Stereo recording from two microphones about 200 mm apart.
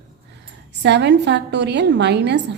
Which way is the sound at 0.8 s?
60° right (ahead or behind).